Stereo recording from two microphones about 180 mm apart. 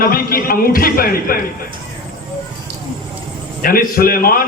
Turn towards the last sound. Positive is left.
turn(degrees=55)  # may be behind; listen again after turning